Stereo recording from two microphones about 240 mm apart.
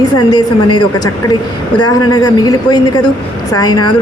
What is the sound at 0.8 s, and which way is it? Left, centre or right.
Speech, centre.